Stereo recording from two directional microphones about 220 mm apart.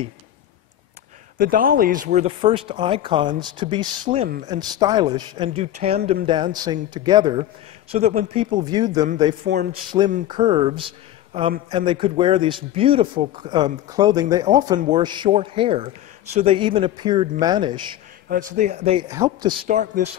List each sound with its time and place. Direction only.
1.4 s speech: 40° right (ahead or behind); by 7.4 s 20° right (ahead or behind)
7.9 s speech: 30° right (ahead or behind)
9.5 s a man's voice: 45° right (ahead or behind)
10.2 s speech: 20° right (ahead or behind)
18.3 s a man's voice: 35° right (ahead or behind)
19.0 s speech: 15° right (ahead or behind)
19.6 s a man's voice: 30° right (ahead or behind)